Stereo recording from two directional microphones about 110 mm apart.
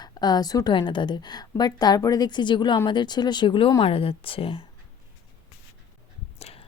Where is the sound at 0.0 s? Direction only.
40° left (ahead or behind).